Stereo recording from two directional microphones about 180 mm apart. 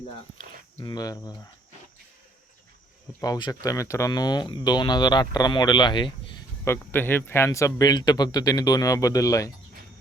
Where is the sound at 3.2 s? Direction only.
20° left (ahead or behind).